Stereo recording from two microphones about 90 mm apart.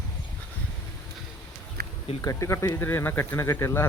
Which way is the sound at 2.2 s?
35° left (ahead or behind).